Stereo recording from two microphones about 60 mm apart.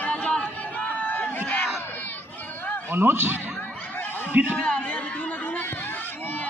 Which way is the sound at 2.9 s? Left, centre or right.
Right.